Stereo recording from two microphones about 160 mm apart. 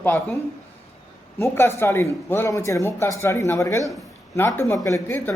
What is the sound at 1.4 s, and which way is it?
Speech, 15° left (ahead or behind).